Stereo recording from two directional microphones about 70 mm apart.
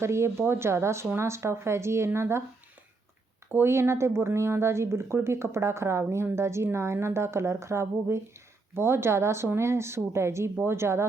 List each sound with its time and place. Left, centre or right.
0.0 s speech: right
3.5 s speech: right